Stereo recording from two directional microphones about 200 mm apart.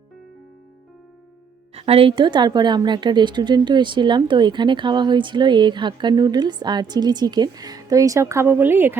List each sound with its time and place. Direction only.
1.7 s a woman's voice: 30° right (ahead or behind); by 9.0 s 10° right (ahead or behind)